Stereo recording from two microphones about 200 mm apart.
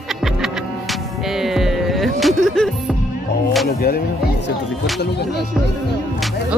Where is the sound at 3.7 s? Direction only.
50° left (ahead or behind).